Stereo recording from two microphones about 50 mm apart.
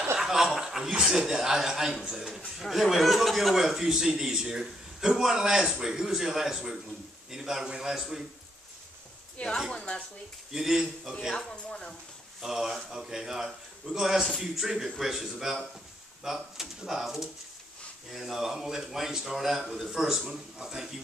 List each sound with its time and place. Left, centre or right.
0.2 s a man's voice: centre
9.8 s speech: left
10.5 s a man's voice: centre
11.3 s speech: centre
12.4 s a man's voice: centre